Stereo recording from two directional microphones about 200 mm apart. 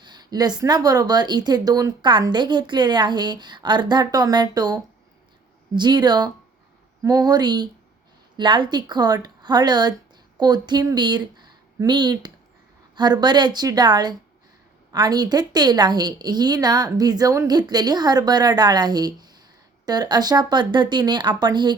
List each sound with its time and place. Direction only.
0.0 s speech: 20° right (ahead or behind)